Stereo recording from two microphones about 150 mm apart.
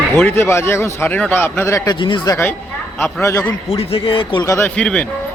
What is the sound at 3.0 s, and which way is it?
Speech, 15° left (ahead or behind).